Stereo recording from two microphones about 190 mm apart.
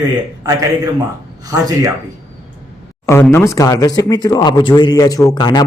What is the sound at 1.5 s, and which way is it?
Speech, 20° right (ahead or behind).